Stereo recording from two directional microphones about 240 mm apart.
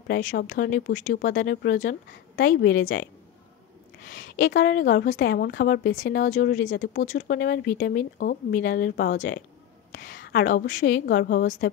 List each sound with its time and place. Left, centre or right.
0.4 s a woman's voice: left